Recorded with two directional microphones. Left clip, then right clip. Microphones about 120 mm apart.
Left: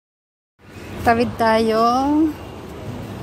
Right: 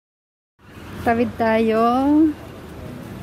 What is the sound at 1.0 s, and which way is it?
A woman's voice, 45° right (ahead or behind).